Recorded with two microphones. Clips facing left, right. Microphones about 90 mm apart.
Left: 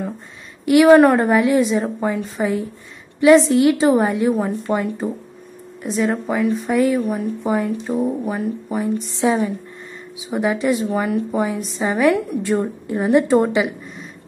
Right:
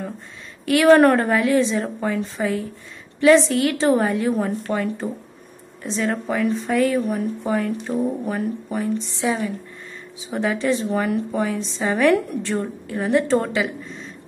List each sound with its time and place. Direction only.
0.7 s a woman's voice: 15° left (ahead or behind)
7.0 s speech: centre (ahead or behind)
7.4 s a woman's voice: 15° left (ahead or behind)
7.8 s a woman's voice: 5° left (ahead or behind)
12.5 s speech: 20° left (ahead or behind)